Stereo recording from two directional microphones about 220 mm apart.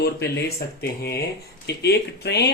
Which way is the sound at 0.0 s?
45° left (ahead or behind).